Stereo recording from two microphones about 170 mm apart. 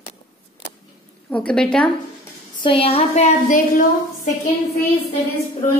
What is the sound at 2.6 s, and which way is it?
A woman's voice, 35° left (ahead or behind).